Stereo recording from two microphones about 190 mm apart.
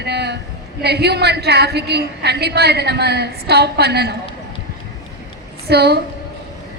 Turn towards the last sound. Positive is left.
turn(degrees=-60)  # may be behind; listen again after turning